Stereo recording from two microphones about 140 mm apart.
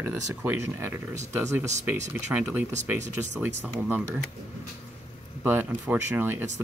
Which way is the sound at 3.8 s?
10° right (ahead or behind).